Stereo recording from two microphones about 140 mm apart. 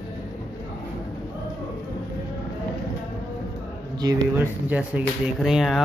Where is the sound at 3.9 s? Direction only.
25° right (ahead or behind).